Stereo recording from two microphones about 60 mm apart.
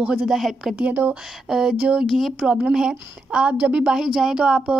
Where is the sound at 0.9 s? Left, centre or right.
Right.